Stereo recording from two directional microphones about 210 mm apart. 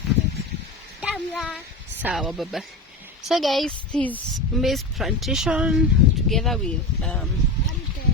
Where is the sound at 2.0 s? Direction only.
5° right (ahead or behind).